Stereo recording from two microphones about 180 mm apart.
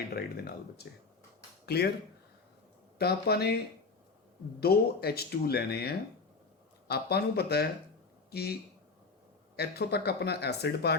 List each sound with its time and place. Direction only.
1.6 s speech: 65° left (ahead or behind)
3.0 s speech: 60° left (ahead or behind)
4.6 s speech: 60° left (ahead or behind)
9.6 s speech: 65° left (ahead or behind)